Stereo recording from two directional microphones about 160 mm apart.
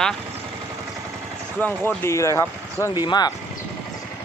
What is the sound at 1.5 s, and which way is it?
Speech, 10° left (ahead or behind).